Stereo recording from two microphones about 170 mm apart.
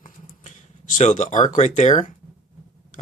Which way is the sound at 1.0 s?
45° left (ahead or behind).